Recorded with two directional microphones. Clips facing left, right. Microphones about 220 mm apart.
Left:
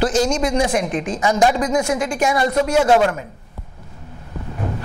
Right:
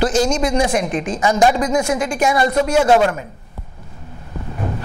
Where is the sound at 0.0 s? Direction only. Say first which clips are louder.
Right 1 dB; 15° right (ahead or behind).